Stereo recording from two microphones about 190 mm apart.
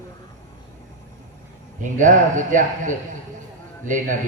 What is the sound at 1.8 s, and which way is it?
A man's voice, 40° right (ahead or behind).